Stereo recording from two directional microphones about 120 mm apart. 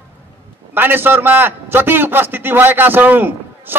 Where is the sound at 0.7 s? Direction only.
15° right (ahead or behind).